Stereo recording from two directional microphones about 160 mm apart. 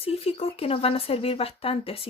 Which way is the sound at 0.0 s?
40° left (ahead or behind).